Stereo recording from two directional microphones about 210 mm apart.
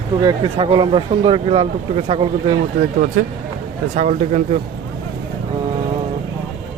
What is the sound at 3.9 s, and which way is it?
Speech, 35° right (ahead or behind).